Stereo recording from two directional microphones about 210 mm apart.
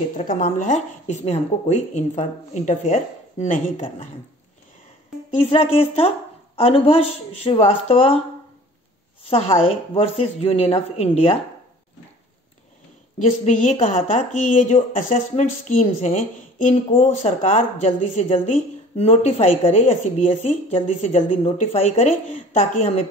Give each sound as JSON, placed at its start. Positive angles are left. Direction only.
{"t": 0.2, "sound": "a woman's voice", "side_deg": 35}
{"t": 5.4, "sound": "speech", "side_deg": 30}
{"t": 9.3, "sound": "speech", "side_deg": 30}
{"t": 13.2, "sound": "a woman's voice", "side_deg": 30}